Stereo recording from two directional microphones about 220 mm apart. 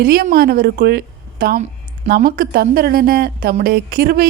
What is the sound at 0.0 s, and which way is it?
A woman's voice, 40° right (ahead or behind).